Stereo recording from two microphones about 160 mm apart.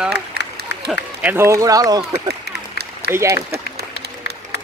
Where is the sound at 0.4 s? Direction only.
90° right.